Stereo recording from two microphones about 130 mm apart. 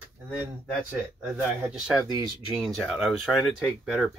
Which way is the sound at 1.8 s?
5° right (ahead or behind).